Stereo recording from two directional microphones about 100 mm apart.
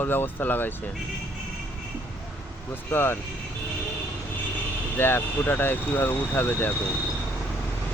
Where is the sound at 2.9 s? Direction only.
25° left (ahead or behind).